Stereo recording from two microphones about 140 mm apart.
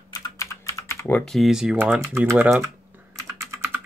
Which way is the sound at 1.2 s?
Centre (ahead or behind).